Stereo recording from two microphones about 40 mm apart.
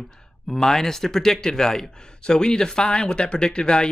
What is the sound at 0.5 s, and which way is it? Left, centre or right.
Speech, centre.